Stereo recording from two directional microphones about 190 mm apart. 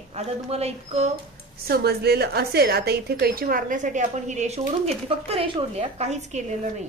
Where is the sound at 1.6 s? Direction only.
55° right (ahead or behind); by 6.9 s 40° right (ahead or behind).